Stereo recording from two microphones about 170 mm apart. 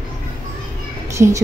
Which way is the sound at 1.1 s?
15° right (ahead or behind).